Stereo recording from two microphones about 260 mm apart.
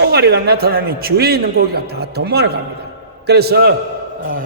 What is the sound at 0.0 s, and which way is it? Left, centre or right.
A man's voice, right.